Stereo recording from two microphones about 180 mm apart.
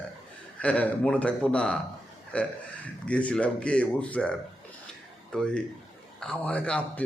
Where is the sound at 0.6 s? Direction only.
10° left (ahead or behind).